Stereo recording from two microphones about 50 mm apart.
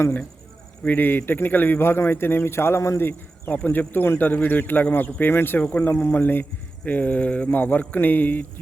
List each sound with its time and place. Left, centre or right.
0.9 s a man's voice: left
3.0 s speech: left
3.5 s a man's voice: left
5.5 s speech: left
5.9 s a man's voice: left
6.8 s a man's voice: left